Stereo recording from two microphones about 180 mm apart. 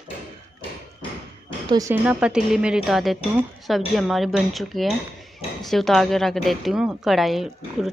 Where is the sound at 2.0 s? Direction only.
5° right (ahead or behind).